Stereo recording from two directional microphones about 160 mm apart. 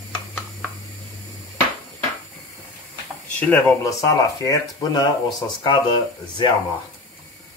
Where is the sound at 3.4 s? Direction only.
10° left (ahead or behind); by 6.4 s 30° left (ahead or behind).